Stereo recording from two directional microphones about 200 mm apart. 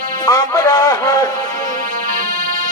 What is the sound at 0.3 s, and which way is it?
A man's voice, 15° left (ahead or behind).